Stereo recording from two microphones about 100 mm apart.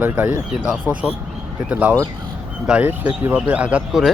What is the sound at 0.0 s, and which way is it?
Speech, 20° right (ahead or behind).